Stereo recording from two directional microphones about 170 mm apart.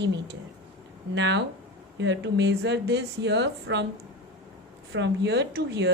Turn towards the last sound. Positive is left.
turn(degrees=-80)